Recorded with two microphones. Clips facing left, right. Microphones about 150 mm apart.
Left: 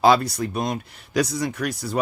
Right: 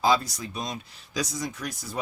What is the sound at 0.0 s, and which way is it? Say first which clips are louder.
Speech: left 6 dB; 65° left (ahead or behind).